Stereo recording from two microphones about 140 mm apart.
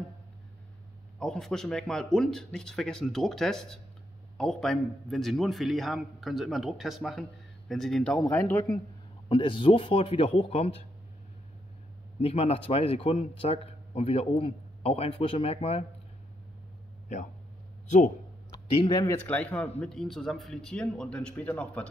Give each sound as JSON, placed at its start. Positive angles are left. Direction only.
{"t": 1.2, "sound": "a man's voice", "side_deg": 5}
{"t": 8.3, "sound": "speech", "side_deg": 15}
{"t": 9.3, "sound": "speech", "side_deg": 40}
{"t": 12.2, "sound": "a man's voice", "side_deg": 45}
{"t": 17.8, "sound": "speech", "side_deg": 60}
{"t": 18.7, "sound": "speech", "side_deg": 40}
{"t": 19.0, "sound": "speech", "side_deg": 10}